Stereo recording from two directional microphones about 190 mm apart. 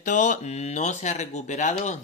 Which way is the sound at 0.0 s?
40° left (ahead or behind).